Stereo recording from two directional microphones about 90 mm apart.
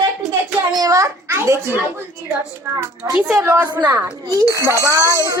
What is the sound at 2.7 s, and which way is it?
Speech, 35° right (ahead or behind).